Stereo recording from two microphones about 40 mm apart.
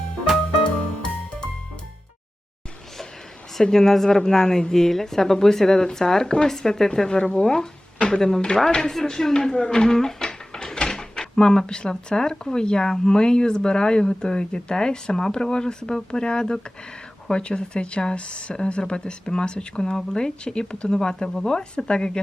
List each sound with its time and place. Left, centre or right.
3.6 s speech: centre
7.9 s a sound: left
8.4 s speech: left
8.6 s speech: centre